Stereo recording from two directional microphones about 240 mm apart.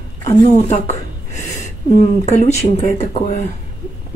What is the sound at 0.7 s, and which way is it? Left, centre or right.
Speech, left.